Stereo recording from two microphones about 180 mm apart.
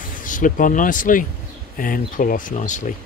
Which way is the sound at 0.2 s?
45° left (ahead or behind).